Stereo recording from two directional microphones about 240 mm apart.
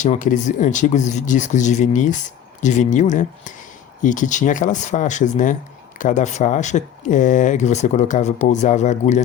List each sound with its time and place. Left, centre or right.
0.0 s speech: left